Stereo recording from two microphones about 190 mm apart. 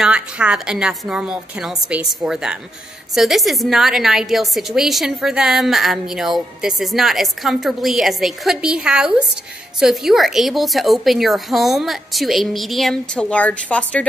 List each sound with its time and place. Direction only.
0.0 s a woman's voice: 5° right (ahead or behind)